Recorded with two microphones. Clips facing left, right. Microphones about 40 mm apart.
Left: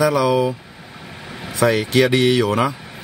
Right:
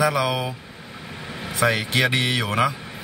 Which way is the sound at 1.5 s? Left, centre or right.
Centre.